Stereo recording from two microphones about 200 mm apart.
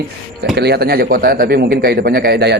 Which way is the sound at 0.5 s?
55° right (ahead or behind).